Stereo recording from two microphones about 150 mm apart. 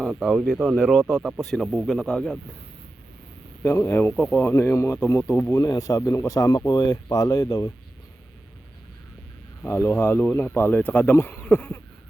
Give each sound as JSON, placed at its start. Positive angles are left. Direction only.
{"t": 0.0, "sound": "speech", "side_deg": 0}
{"t": 3.6, "sound": "speech", "side_deg": 15}
{"t": 9.6, "sound": "speech", "side_deg": 15}